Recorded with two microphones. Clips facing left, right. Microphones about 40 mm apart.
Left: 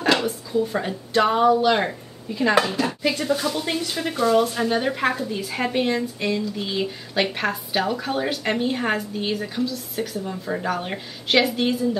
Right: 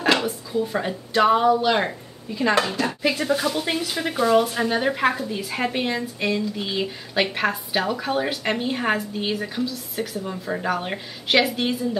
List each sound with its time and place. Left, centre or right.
0.0 s speech: centre